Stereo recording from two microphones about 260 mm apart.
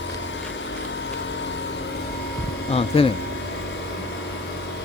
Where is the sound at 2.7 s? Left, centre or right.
Left.